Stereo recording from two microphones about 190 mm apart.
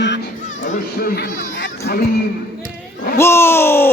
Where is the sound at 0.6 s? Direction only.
45° left (ahead or behind).